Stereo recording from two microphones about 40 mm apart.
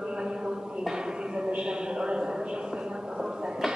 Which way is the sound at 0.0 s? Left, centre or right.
Centre.